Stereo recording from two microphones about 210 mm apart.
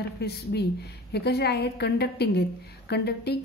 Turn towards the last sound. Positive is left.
turn(degrees=50)  # may be behind; listen again after turning